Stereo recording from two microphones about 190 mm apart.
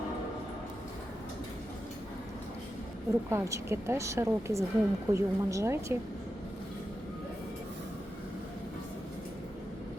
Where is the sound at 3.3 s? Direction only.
15° right (ahead or behind).